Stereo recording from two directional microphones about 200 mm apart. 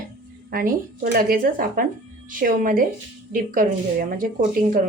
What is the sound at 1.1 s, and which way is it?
Speech, 45° right (ahead or behind).